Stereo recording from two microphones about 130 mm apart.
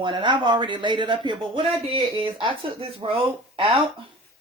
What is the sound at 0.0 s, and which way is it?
Speech, 40° right (ahead or behind).